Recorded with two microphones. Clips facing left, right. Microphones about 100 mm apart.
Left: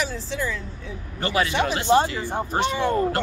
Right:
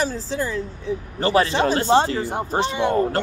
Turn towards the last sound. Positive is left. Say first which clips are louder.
# right 2 dB
turn(degrees=-25)  # may be behind; listen again after turning